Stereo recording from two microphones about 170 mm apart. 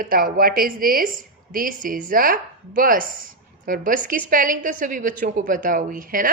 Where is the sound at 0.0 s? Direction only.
55° right (ahead or behind).